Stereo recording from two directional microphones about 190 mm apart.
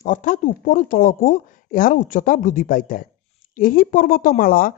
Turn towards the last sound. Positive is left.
turn(degrees=50)  # may be behind; listen again after turning